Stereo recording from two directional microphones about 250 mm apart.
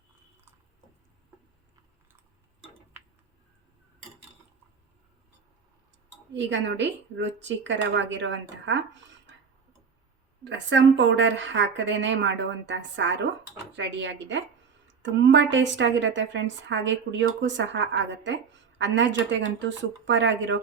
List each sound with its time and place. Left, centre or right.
6.3 s a woman's voice: right
10.7 s a woman's voice: right